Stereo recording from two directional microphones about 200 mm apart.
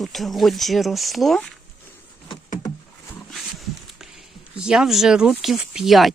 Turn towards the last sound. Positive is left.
turn(degrees=0)  # may be behind; listen again after turning